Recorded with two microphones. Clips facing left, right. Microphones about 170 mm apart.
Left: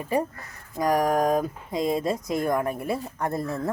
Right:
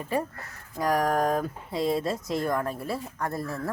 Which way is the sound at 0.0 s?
15° left (ahead or behind).